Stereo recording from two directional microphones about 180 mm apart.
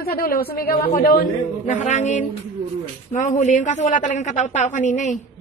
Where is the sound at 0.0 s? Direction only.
55° left (ahead or behind).